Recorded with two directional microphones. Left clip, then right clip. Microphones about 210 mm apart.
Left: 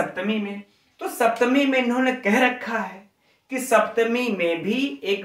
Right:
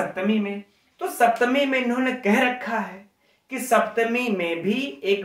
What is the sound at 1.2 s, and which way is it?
Speech, 25° right (ahead or behind).